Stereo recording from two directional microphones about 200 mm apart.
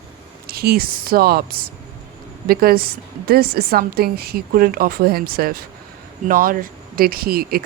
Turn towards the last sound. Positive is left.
turn(degrees=-50)  # may be behind; listen again after turning